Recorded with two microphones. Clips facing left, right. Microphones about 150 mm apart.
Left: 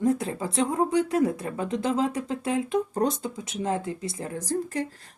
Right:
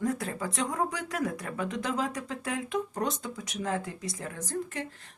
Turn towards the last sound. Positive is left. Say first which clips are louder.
# left 6 dB
turn(degrees=40)  # may be behind; listen again after turning